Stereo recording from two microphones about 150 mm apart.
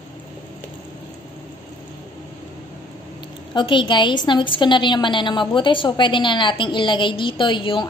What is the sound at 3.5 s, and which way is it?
A woman's voice, 35° left (ahead or behind).